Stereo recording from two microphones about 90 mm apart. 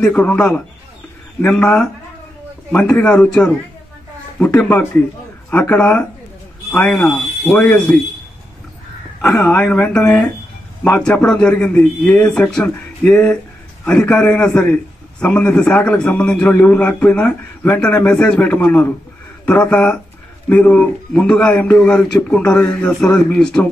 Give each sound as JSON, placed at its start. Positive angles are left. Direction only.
{"t": 0.0, "sound": "a man's voice", "side_deg": 15}
{"t": 9.6, "sound": "a man's voice", "side_deg": 15}